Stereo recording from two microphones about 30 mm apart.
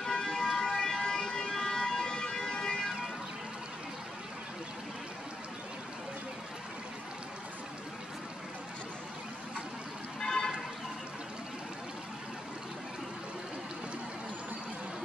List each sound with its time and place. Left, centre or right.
0.1 s siren: left
1.0 s emergency vehicle: centre
2.1 s siren: left
10.2 s a sound: left